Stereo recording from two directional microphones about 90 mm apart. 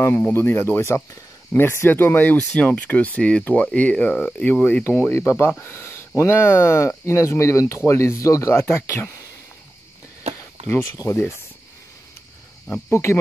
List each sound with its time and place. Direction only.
0.0 s speech: 25° left (ahead or behind)
11.1 s speech: 30° left (ahead or behind)
12.9 s cricket: 30° left (ahead or behind)